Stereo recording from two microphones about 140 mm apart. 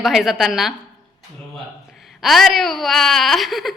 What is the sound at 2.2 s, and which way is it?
A woman's voice, centre (ahead or behind).